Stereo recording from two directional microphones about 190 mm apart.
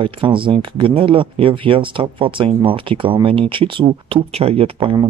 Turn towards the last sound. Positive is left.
turn(degrees=-25)  # may be behind; listen again after turning